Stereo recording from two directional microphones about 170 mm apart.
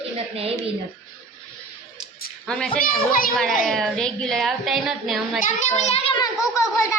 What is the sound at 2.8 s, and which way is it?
Speech, 55° left (ahead or behind).